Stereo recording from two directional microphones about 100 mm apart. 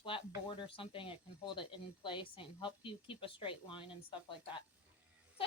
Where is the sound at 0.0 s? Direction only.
60° left (ahead or behind).